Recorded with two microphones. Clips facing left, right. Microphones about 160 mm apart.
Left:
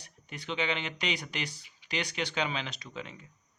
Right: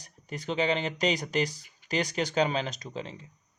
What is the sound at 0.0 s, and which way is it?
Speech, 40° right (ahead or behind).